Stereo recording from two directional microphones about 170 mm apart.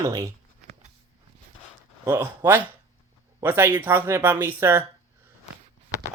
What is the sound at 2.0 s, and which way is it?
Speech, 10° right (ahead or behind).